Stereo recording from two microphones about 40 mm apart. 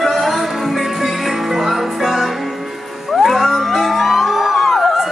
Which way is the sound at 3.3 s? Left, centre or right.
Centre.